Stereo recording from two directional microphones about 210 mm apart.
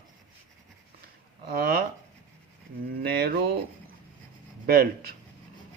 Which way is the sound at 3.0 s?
50° right (ahead or behind).